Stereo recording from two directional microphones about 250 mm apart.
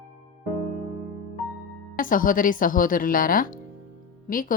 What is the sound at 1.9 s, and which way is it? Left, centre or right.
Speech, left.